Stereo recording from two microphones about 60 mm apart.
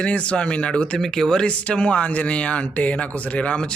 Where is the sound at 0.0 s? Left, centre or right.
Centre.